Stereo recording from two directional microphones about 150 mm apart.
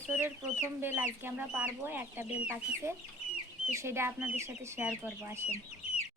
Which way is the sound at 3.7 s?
15° right (ahead or behind).